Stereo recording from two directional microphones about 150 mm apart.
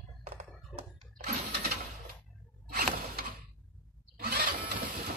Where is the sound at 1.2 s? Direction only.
90° right.